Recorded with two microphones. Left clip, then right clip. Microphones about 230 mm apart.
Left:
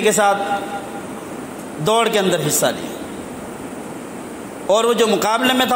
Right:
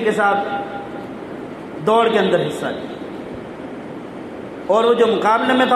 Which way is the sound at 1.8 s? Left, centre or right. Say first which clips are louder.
Right 1 dB; left.